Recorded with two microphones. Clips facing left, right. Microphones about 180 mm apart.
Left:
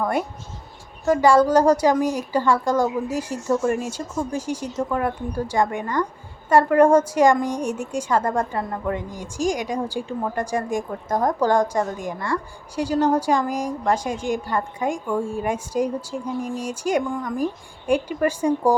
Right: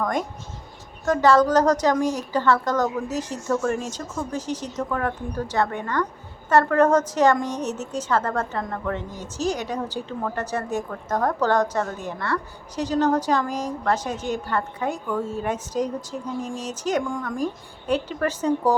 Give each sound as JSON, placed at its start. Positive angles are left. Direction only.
{"t": 0.0, "sound": "a woman's voice", "side_deg": 10}